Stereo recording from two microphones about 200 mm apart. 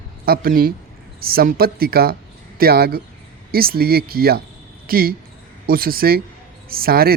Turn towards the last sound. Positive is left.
turn(degrees=-50)  # may be behind; listen again after turning